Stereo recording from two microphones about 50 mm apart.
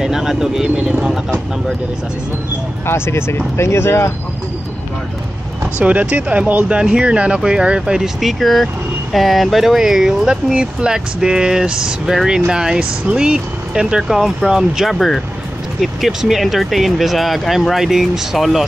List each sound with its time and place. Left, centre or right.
0.0 s speech: centre
2.9 s speech: left
5.8 s speech: right
6.8 s speech: centre
8.2 s speech: centre
15.0 s speech: centre
15.8 s speech: centre